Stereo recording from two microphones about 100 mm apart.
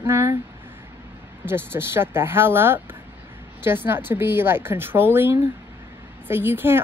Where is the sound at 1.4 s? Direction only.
25° right (ahead or behind).